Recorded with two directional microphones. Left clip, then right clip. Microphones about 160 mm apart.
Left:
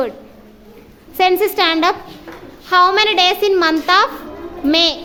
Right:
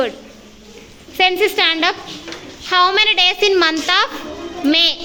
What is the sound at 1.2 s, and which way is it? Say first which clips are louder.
A child's voice: left 1 dB; 20° left (ahead or behind).